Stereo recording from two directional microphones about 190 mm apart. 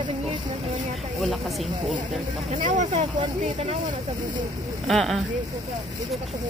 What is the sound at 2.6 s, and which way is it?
Speech, 40° right (ahead or behind).